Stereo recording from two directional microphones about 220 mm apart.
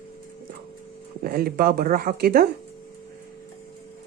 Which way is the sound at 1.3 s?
45° right (ahead or behind).